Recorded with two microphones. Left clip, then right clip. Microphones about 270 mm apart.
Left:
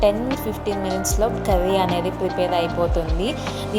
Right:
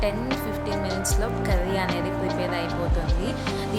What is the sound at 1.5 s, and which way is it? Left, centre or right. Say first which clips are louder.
A woman's voice: left 7 dB; centre.